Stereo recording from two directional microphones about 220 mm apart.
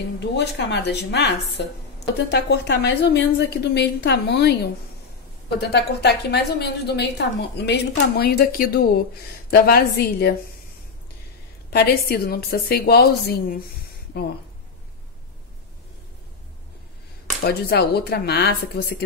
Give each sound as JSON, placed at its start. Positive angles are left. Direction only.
{"t": 0.2, "sound": "a woman's voice", "side_deg": 50}
{"t": 5.6, "sound": "a woman's voice", "side_deg": 50}
{"t": 11.7, "sound": "a woman's voice", "side_deg": 45}
{"t": 17.4, "sound": "a woman's voice", "side_deg": 45}